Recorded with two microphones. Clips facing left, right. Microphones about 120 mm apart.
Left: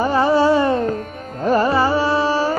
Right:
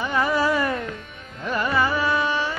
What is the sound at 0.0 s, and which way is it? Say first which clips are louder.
Music: left 7 dB; 30° left (ahead or behind).